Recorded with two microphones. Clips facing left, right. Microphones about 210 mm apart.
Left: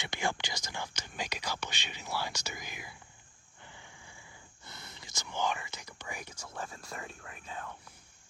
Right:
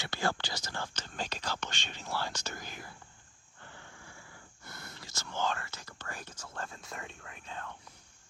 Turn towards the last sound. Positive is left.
turn(degrees=5)  # may be behind; listen again after turning